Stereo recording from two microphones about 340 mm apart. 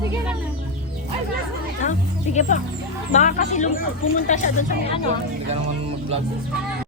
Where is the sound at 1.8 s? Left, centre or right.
Left.